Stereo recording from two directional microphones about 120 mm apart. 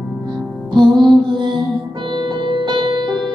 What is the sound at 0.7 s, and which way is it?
Music, 40° right (ahead or behind).